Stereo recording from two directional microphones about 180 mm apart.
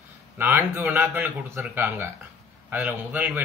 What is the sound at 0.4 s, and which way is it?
Speech, 10° right (ahead or behind).